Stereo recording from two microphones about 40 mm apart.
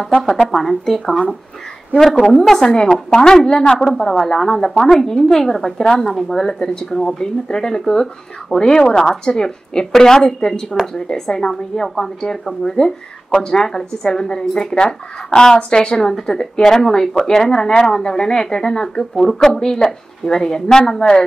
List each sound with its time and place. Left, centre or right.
0.5 s speech: centre
2.3 s speech: centre
17.1 s speech: centre
17.4 s speech: centre
19.1 s speech: centre